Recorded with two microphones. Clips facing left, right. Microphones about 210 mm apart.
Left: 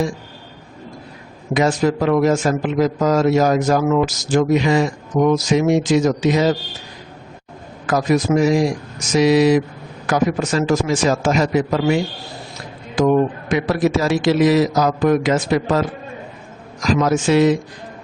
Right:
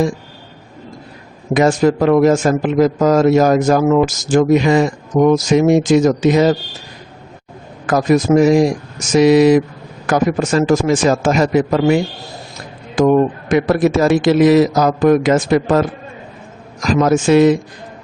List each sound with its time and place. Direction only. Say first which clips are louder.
1.5 s a man's voice: right 4 dB; 45° right (ahead or behind)
7.9 s a man's voice: right 4 dB; 50° right (ahead or behind)
13.0 s a man's voice: right 3 dB; 50° right (ahead or behind)
16.8 s a man's voice: right 3 dB; 50° right (ahead or behind)